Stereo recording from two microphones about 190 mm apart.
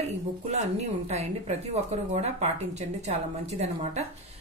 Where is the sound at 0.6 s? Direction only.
35° right (ahead or behind).